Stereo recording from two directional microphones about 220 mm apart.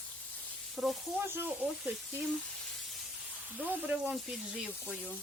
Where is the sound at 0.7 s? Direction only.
Centre (ahead or behind).